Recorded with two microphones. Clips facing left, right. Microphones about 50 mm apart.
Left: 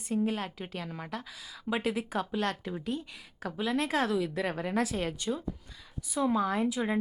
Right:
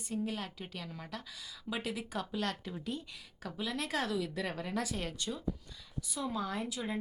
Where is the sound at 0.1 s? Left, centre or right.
Left.